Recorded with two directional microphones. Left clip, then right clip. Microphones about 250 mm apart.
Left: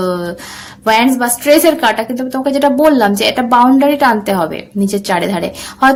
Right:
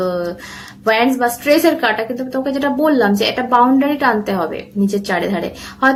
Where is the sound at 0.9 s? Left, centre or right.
Left.